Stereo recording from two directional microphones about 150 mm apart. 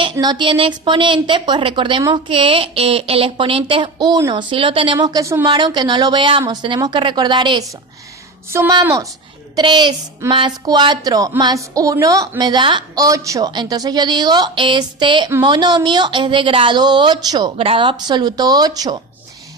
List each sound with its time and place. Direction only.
0.0 s speech: 30° right (ahead or behind)
4.9 s speech: 25° right (ahead or behind)
5.5 s speech: 30° right (ahead or behind)
8.5 s speech: 20° right (ahead or behind)